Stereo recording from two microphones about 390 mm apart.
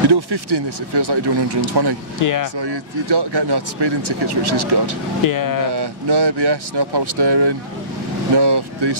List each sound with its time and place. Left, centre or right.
0.1 s speech: right
2.2 s speech: left
2.6 s speech: right
5.2 s speech: left
5.8 s speech: right